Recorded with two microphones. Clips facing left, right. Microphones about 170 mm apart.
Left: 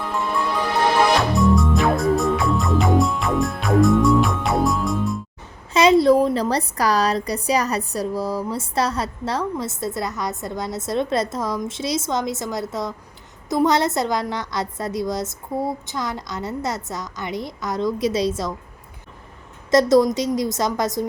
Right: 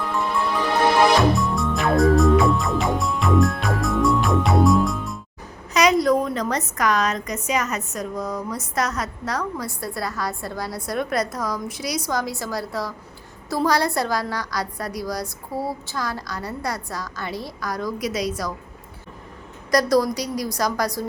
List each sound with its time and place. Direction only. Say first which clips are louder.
1.4 s music: left 5 dB; centre (ahead or behind)
5.7 s a woman's voice: left 4 dB; 30° left (ahead or behind)
19.7 s a woman's voice: left 4 dB; 25° left (ahead or behind)